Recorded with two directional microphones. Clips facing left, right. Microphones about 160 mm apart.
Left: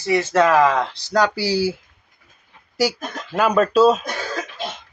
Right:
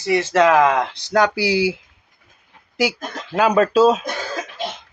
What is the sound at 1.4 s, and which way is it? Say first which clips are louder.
Speech: right 2 dB; 65° right (ahead or behind).